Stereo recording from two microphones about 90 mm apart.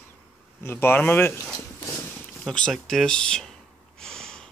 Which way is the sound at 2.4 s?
5° left (ahead or behind).